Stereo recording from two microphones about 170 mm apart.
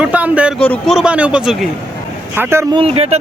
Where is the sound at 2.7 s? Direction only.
35° right (ahead or behind).